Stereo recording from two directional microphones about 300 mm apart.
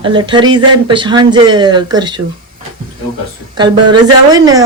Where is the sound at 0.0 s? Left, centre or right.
Centre.